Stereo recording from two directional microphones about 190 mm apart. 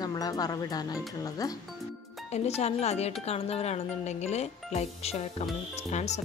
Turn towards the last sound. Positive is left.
turn(degrees=35)  # may be behind; listen again after turning